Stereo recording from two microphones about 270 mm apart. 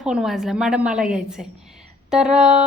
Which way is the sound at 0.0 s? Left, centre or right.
Centre.